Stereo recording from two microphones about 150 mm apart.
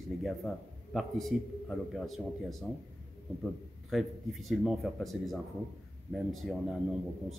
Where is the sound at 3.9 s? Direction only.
Centre (ahead or behind).